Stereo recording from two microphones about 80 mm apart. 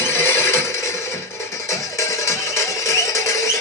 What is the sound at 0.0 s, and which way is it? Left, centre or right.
Neigh, left.